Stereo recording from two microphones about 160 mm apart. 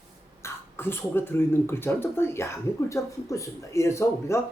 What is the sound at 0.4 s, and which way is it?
Speech, 15° left (ahead or behind).